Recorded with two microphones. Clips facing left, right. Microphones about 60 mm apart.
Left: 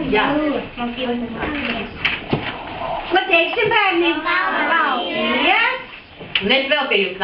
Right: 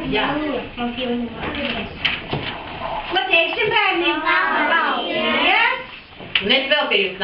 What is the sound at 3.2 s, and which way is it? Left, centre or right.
A child's voice, centre.